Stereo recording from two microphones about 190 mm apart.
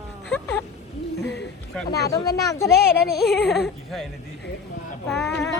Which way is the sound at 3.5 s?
Centre (ahead or behind).